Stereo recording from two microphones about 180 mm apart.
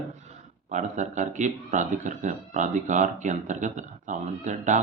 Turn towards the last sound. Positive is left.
turn(degrees=-45)  # may be behind; listen again after turning